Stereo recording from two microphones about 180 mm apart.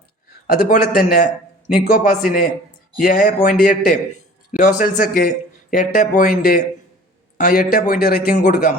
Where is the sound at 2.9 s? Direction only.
45° left (ahead or behind).